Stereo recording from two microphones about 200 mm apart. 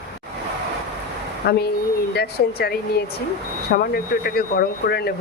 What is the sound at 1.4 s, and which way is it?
Speech, 55° left (ahead or behind).